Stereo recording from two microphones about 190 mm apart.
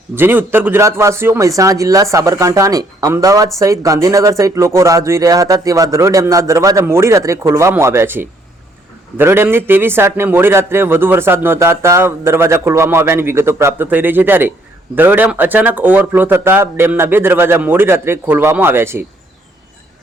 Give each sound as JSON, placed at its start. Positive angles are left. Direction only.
{"t": 0.2, "sound": "a man's voice", "side_deg": -10}